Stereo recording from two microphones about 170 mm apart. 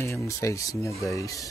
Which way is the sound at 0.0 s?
15° left (ahead or behind).